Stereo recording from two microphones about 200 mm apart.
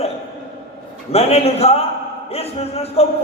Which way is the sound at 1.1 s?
30° left (ahead or behind).